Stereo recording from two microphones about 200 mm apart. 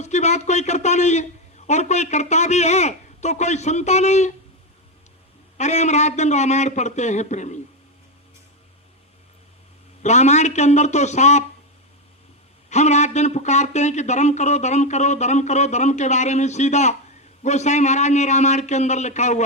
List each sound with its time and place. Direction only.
0.0 s a man's voice: 35° left (ahead or behind)
5.5 s a man's voice: 35° left (ahead or behind)
10.0 s a man's voice: 35° left (ahead or behind)
12.7 s a man's voice: 35° left (ahead or behind)